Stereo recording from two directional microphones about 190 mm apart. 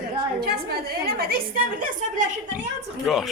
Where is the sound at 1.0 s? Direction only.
50° right (ahead or behind).